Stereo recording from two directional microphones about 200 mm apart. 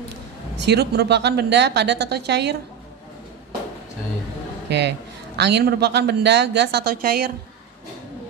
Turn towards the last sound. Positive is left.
turn(degrees=-50)  # may be behind; listen again after turning